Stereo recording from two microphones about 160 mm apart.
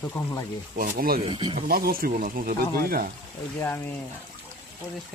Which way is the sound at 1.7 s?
70° right (ahead or behind).